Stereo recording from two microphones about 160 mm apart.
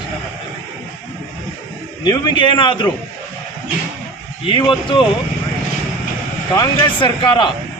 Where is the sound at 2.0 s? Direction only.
30° left (ahead or behind).